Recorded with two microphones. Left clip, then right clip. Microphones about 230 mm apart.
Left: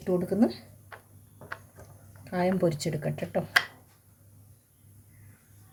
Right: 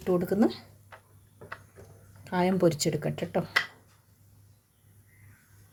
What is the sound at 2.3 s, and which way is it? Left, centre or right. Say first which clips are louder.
Speech: right 2 dB; right.